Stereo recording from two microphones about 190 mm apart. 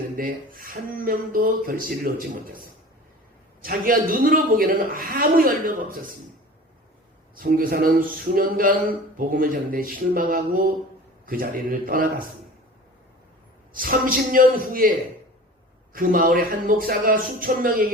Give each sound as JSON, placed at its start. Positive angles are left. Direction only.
{"t": 0.2, "sound": "a woman's voice", "side_deg": -50}
{"t": 7.3, "sound": "a woman's voice", "side_deg": -50}
{"t": 13.7, "sound": "a woman's voice", "side_deg": -50}